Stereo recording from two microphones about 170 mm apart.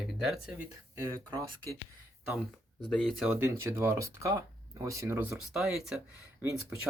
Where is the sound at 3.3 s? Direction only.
15° right (ahead or behind).